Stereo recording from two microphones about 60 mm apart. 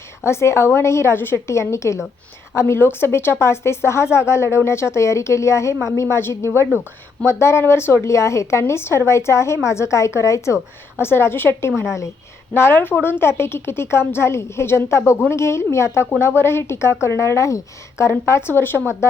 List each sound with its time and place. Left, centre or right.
0.3 s a woman's voice: left
6.4 s speech: right
7.3 s a woman's voice: left
11.0 s a woman's voice: left
12.5 s a woman's voice: left
18.3 s speech: left